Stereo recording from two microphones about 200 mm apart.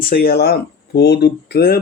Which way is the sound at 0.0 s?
50° left (ahead or behind).